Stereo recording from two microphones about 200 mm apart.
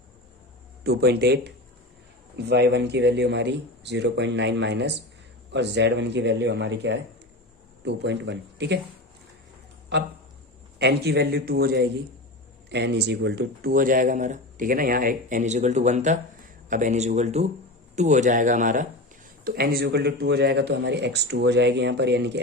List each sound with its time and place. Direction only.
0.9 s speech: 55° right (ahead or behind)
9.9 s speech: 60° right (ahead or behind)